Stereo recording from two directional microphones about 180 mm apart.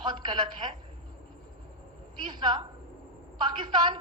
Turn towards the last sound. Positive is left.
turn(degrees=-25)  # may be behind; listen again after turning